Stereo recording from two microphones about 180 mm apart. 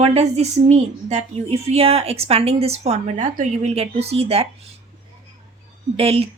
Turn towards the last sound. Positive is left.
turn(degrees=-30)  # may be behind; listen again after turning